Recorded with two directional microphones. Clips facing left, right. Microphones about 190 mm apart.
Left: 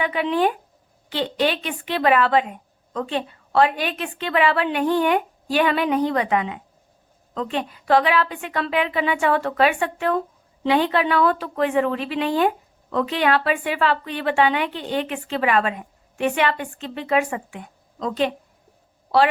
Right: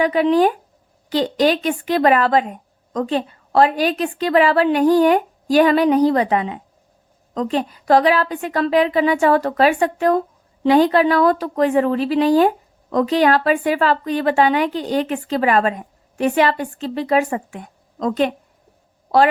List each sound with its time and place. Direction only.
0.0 s a woman's voice: 40° right (ahead or behind)